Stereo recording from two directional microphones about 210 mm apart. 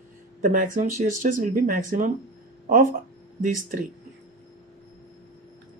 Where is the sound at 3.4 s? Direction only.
40° right (ahead or behind).